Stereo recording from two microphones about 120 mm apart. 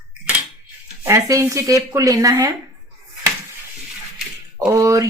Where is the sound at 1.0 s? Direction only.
25° right (ahead or behind).